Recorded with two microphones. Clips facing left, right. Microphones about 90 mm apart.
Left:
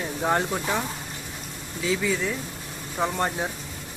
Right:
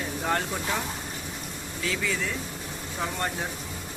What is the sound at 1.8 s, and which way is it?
Speech, 15° left (ahead or behind).